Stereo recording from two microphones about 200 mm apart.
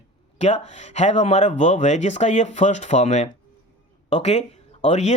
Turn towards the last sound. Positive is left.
turn(degrees=35)  # may be behind; listen again after turning